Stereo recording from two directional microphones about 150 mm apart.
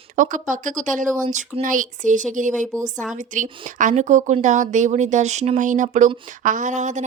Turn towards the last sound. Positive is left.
turn(degrees=-55)  # may be behind; listen again after turning